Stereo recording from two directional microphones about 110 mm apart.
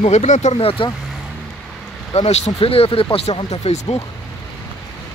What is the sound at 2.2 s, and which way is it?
Speech, 70° left (ahead or behind).